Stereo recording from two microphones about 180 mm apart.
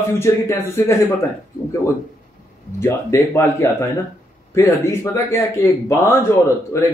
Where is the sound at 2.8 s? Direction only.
15° left (ahead or behind).